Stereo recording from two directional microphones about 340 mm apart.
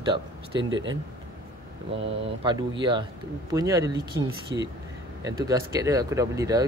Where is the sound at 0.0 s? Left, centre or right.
Centre.